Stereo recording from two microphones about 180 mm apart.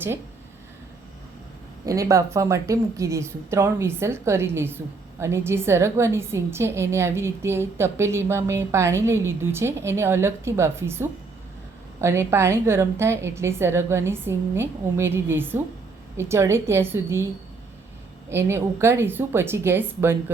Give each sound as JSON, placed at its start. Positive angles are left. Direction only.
{"t": 1.8, "sound": "a woman's voice", "side_deg": -20}
{"t": 18.3, "sound": "a woman's voice", "side_deg": -15}